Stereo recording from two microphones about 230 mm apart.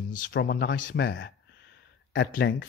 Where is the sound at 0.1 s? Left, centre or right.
Left.